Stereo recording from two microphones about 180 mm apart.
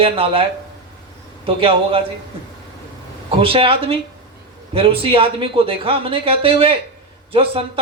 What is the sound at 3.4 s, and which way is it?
Speech, 30° right (ahead or behind).